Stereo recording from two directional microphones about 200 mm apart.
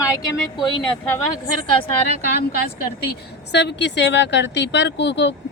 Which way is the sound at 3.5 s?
60° left (ahead or behind).